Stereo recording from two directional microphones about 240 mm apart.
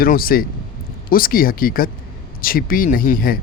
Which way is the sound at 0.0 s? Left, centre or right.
Left.